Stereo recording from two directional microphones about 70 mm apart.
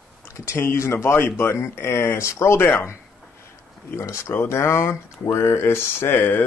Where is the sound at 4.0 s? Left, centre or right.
Left.